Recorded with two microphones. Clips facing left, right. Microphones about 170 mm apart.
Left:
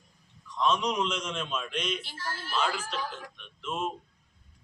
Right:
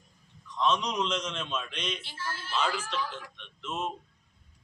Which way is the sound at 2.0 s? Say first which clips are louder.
Even; 40° left (ahead or behind).